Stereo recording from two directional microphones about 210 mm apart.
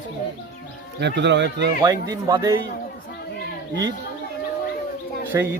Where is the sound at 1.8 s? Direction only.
15° right (ahead or behind).